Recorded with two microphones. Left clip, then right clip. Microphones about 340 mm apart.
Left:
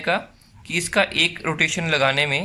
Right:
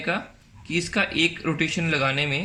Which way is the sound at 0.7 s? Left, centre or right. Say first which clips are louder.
Left 4 dB; centre.